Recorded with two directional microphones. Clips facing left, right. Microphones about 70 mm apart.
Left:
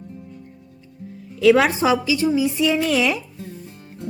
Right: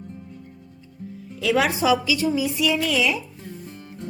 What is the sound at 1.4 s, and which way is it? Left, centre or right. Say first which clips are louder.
A woman's voice: left 6 dB; left.